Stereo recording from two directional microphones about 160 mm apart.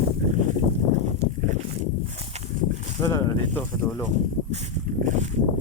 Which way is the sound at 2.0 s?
40° right (ahead or behind).